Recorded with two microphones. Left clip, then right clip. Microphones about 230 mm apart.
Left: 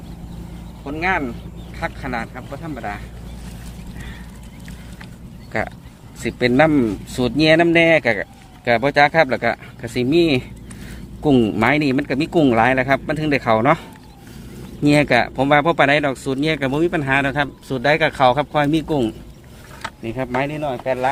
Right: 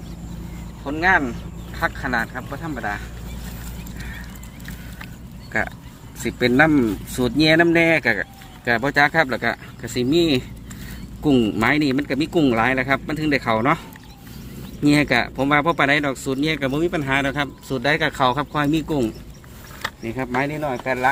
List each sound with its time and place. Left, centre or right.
0.9 s speech: centre
6.2 s speech: left
14.8 s speech: left; by 21.1 s centre